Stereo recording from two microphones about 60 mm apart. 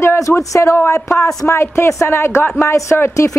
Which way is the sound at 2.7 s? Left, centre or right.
Left.